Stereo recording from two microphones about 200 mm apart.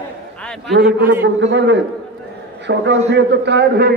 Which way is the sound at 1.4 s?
65° right (ahead or behind).